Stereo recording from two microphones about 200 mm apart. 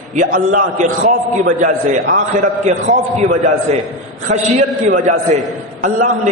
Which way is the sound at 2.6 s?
35° right (ahead or behind).